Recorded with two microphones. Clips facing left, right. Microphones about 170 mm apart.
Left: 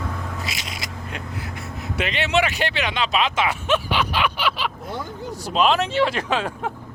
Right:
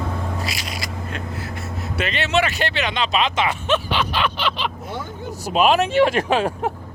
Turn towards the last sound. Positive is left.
turn(degrees=-15)  # may be behind; listen again after turning